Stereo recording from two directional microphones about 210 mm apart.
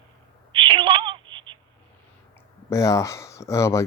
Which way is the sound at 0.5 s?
25° right (ahead or behind).